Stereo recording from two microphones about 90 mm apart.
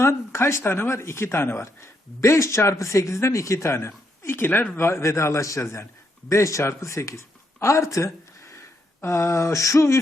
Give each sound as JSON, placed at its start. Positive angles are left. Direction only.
{"t": 0.0, "sound": "speech", "side_deg": 30}
{"t": 4.8, "sound": "speech", "side_deg": 30}